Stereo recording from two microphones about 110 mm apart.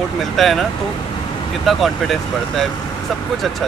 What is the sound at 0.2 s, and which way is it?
Speech, centre (ahead or behind).